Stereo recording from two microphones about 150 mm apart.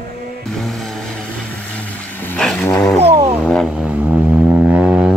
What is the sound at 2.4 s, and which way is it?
Vehicle, 5° left (ahead or behind).